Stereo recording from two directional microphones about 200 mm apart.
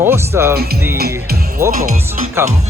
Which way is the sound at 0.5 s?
50° right (ahead or behind).